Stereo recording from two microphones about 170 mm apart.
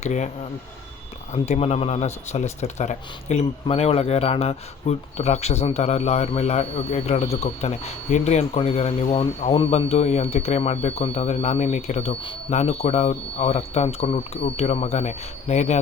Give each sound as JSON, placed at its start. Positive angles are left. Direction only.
{"t": 0.0, "sound": "speech", "side_deg": 45}
{"t": 1.3, "sound": "speech", "side_deg": 40}